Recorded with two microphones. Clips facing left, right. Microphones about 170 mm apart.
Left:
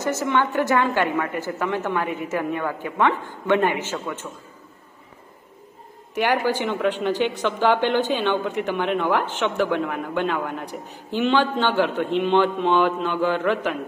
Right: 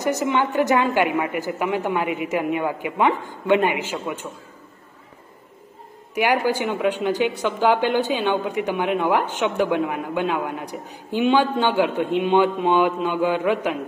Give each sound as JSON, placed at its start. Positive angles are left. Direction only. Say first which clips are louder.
{"t": 0.0, "sound": "a woman's voice", "louder": "right 1 dB", "side_deg": -15}
{"t": 6.1, "sound": "a woman's voice", "louder": "right 1 dB", "side_deg": -10}